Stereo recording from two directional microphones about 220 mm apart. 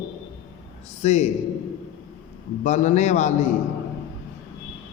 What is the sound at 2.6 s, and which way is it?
Speech, 30° left (ahead or behind).